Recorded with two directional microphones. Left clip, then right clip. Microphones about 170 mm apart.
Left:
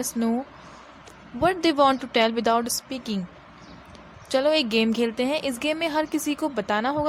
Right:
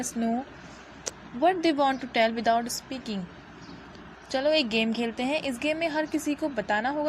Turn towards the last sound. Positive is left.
turn(degrees=30)  # may be behind; listen again after turning